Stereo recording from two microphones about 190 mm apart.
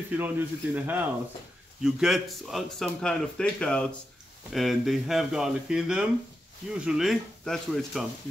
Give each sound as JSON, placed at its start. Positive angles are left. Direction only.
{"t": 0.2, "sound": "speech", "side_deg": -10}